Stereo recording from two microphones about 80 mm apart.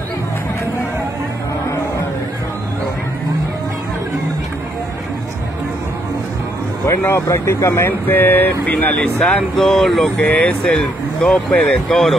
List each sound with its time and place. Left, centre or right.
6.9 s speech: left
8.1 s speech: left
8.7 s speech: centre
10.1 s speech: centre